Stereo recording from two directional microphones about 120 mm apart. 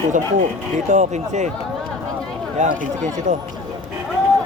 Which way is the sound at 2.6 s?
90° right.